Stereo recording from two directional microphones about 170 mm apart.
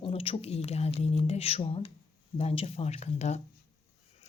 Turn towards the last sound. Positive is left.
turn(degrees=40)  # may be behind; listen again after turning